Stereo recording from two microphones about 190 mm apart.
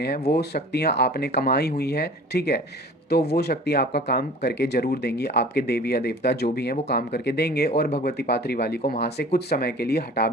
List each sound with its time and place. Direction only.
0.3 s speech: 60° left (ahead or behind)